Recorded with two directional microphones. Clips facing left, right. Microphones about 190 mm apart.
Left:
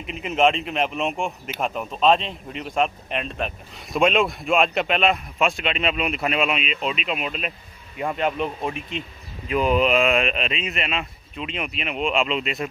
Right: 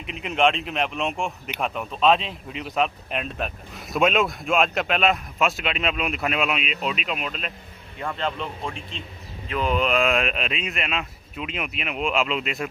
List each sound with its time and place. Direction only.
0.0 s a man's voice: centre (ahead or behind)